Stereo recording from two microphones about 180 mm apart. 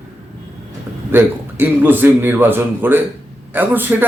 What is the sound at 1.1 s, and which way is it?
Speech, 10° right (ahead or behind).